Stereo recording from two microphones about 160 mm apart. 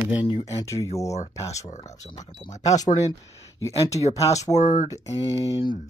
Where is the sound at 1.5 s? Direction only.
45° left (ahead or behind).